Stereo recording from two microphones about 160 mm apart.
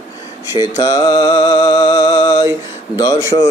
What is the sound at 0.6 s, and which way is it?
Mantra, 25° left (ahead or behind).